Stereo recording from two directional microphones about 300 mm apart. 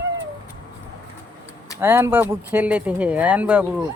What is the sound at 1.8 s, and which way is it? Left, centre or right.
Speech, centre.